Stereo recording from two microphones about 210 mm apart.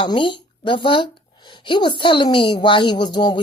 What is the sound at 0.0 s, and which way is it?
A woman's voice, 20° left (ahead or behind).